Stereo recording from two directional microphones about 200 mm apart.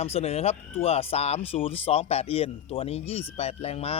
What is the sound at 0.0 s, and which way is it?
A man's voice, 30° left (ahead or behind).